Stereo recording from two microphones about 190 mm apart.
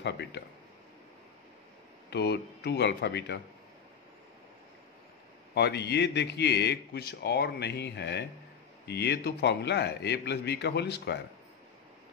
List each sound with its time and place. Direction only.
0.0 s a man's voice: 65° left (ahead or behind)
2.0 s a man's voice: 60° left (ahead or behind)
5.5 s a man's voice: 60° left (ahead or behind)